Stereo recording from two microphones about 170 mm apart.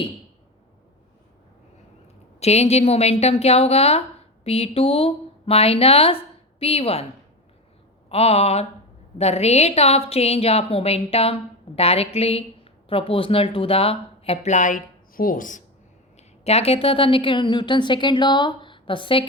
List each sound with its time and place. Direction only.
2.4 s speech: 40° left (ahead or behind)
8.1 s speech: 35° left (ahead or behind)
16.1 s a woman's voice: 40° left (ahead or behind)